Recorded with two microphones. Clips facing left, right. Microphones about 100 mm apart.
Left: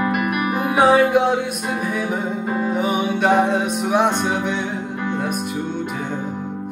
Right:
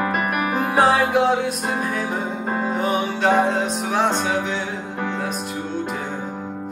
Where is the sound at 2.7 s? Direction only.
10° left (ahead or behind).